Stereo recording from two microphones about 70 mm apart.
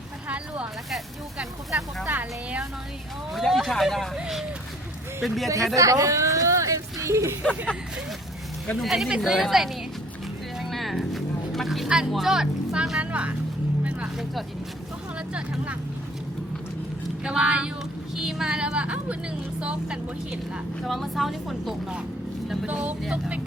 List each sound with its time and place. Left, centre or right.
0.3 s a sound: centre
0.9 s speech: centre
2.0 s speech: centre
3.3 s speech: centre
5.2 s speech: centre
5.7 s a sound: right
8.8 s speech: centre
10.6 s music: centre
13.8 s vehicle: centre
17.2 s a woman's voice: centre
20.8 s speech: centre
22.6 s a woman's voice: centre